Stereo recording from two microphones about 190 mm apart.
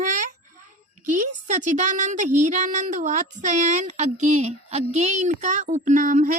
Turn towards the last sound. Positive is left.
turn(degrees=-45)  # may be behind; listen again after turning